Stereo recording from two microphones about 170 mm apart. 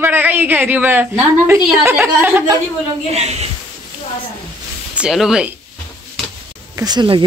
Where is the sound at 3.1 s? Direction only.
40° right (ahead or behind).